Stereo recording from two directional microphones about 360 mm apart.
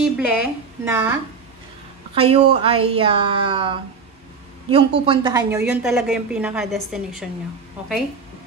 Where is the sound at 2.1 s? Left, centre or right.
Centre.